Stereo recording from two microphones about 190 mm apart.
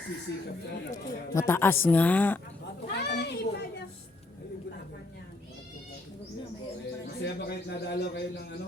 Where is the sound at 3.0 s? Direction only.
60° left (ahead or behind).